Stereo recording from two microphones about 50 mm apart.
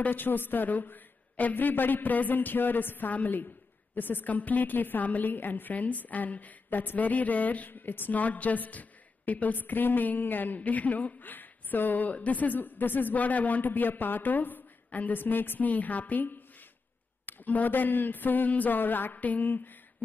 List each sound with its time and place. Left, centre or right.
0.0 s a woman's voice: left